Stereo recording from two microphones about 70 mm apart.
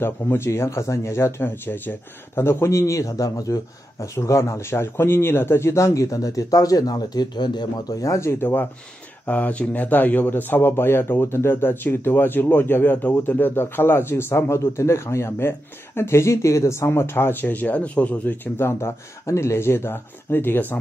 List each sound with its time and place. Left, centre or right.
0.0 s speech: left
8.0 s speech: left
9.2 s speech: left